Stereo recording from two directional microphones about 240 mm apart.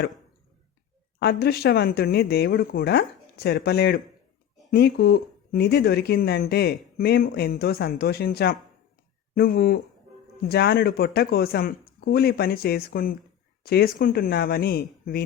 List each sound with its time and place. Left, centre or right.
1.2 s speech: left